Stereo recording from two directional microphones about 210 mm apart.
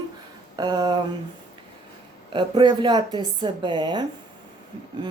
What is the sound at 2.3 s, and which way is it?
Speech, 20° right (ahead or behind).